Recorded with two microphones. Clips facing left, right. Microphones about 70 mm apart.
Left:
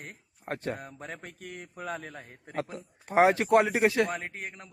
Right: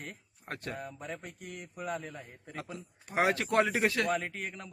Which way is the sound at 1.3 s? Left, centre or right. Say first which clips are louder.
Left 2 dB; left.